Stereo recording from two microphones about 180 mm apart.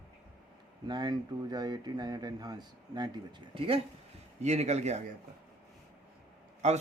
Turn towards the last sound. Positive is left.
turn(degrees=-40)  # may be behind; listen again after turning